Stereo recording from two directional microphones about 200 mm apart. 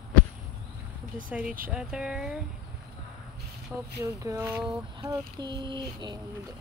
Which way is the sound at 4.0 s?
15° right (ahead or behind).